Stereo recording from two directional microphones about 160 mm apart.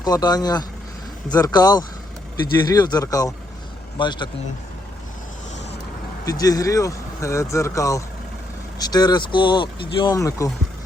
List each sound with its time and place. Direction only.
0.0 s speech: 25° left (ahead or behind)
6.2 s speech: 20° left (ahead or behind)